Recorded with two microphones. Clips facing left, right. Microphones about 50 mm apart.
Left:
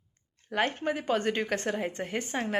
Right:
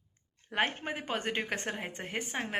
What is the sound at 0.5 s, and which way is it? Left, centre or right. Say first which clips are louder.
A woman's voice: left 3 dB; right.